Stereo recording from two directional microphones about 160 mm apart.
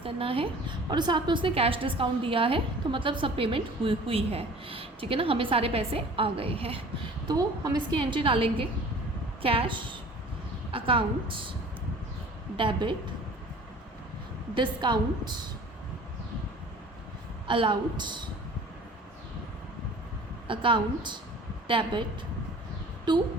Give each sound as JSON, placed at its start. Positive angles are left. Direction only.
{"t": 0.0, "sound": "a woman's voice", "side_deg": -35}
{"t": 7.3, "sound": "a woman's voice", "side_deg": -25}
{"t": 12.5, "sound": "a woman's voice", "side_deg": -30}
{"t": 14.5, "sound": "a woman's voice", "side_deg": -30}
{"t": 17.4, "sound": "a woman's voice", "side_deg": -30}
{"t": 20.5, "sound": "a woman's voice", "side_deg": -30}